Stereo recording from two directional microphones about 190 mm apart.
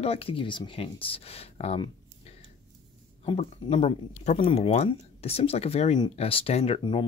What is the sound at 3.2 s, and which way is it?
Speech, 30° left (ahead or behind).